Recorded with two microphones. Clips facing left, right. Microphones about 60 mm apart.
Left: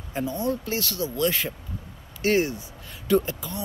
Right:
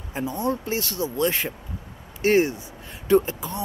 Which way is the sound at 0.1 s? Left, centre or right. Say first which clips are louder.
Right 1 dB; right.